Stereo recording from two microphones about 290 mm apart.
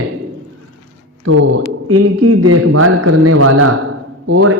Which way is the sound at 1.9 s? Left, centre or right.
Right.